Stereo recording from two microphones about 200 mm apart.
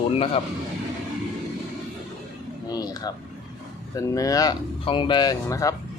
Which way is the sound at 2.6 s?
20° left (ahead or behind).